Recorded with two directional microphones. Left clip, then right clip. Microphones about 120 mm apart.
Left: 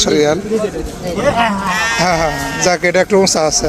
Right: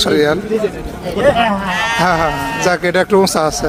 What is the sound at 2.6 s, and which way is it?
Speech, 20° right (ahead or behind).